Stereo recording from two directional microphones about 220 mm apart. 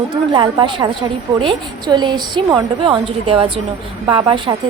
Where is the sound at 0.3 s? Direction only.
20° right (ahead or behind).